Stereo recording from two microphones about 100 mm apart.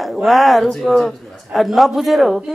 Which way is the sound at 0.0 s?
Centre (ahead or behind).